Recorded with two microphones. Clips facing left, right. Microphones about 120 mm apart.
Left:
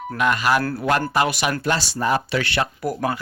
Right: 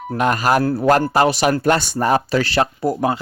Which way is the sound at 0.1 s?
40° right (ahead or behind).